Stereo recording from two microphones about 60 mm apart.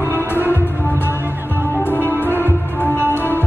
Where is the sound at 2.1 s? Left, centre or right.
Left.